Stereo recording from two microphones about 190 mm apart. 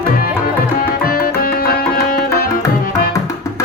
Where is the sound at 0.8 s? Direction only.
50° left (ahead or behind).